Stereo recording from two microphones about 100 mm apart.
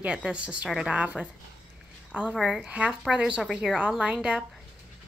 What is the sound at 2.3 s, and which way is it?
Speech, 5° right (ahead or behind).